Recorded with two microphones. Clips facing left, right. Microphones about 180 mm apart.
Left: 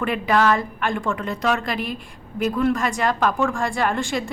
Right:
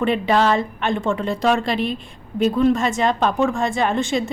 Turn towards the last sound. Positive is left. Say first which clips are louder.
# right 3 dB
turn(degrees=-20)  # may be behind; listen again after turning